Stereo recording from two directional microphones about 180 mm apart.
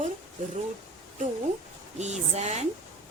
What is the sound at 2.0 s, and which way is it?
Speech, 40° right (ahead or behind).